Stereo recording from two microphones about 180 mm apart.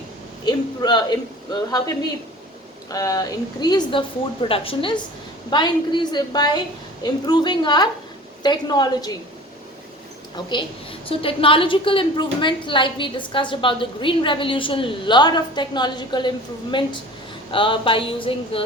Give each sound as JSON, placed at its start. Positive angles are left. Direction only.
{"t": 0.4, "sound": "a woman's voice", "side_deg": 25}
{"t": 2.9, "sound": "a woman's voice", "side_deg": 20}
{"t": 10.3, "sound": "a woman's voice", "side_deg": 25}